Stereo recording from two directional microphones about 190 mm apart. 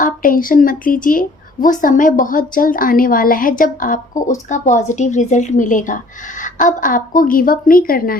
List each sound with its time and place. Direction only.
0.0 s a woman's voice: 45° left (ahead or behind)